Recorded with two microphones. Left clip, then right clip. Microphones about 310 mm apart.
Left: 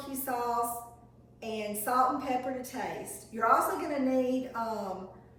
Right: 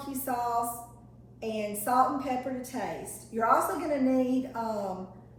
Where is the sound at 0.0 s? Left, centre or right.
Centre.